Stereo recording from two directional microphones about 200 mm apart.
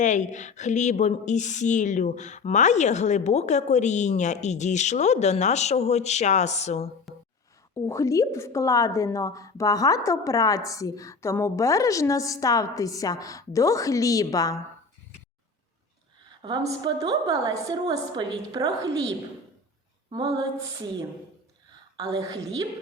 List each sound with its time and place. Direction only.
0.0 s speech: 35° left (ahead or behind)
7.1 s a sound: centre (ahead or behind)
7.9 s a woman's voice: 15° left (ahead or behind)
16.4 s a woman's voice: 20° right (ahead or behind)
20.1 s a sound: 20° right (ahead or behind)
21.9 s a woman's voice: 20° right (ahead or behind)